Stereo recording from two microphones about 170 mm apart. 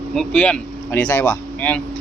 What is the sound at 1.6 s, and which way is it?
Speech, 10° left (ahead or behind).